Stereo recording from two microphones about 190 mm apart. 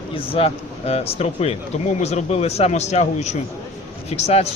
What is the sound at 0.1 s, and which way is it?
Speech, 30° left (ahead or behind).